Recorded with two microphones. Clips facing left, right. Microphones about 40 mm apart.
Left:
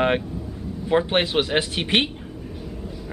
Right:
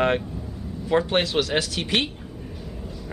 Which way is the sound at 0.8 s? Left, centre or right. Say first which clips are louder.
Left 1 dB; left.